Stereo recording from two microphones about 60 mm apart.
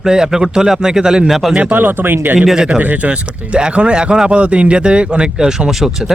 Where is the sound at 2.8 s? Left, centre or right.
Right.